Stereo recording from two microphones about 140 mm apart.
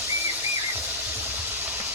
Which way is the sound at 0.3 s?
15° right (ahead or behind).